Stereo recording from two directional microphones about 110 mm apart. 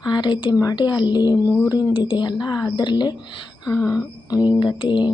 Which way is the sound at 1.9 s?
45° left (ahead or behind).